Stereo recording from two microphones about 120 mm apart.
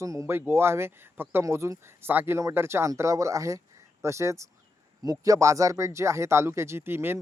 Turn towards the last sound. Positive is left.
turn(degrees=-20)  # may be behind; listen again after turning